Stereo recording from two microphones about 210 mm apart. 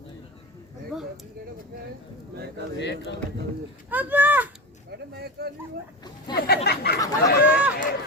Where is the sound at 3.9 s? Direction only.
10° right (ahead or behind).